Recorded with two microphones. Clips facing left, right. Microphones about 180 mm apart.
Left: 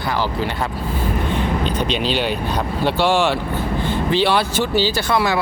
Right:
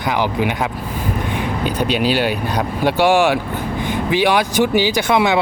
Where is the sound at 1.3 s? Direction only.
10° right (ahead or behind).